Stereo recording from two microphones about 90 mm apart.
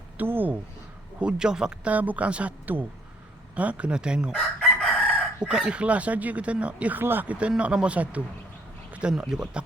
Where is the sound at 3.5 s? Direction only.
15° right (ahead or behind).